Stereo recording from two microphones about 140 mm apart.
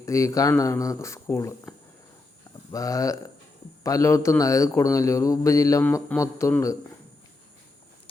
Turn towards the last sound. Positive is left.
turn(degrees=20)  # may be behind; listen again after turning